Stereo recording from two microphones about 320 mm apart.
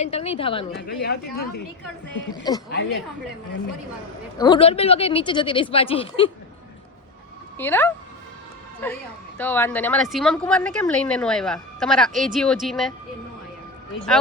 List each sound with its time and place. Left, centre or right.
0.0 s speech: centre
0.8 s speech: left
2.6 s speech: left
4.4 s speech: centre
7.6 s speech: centre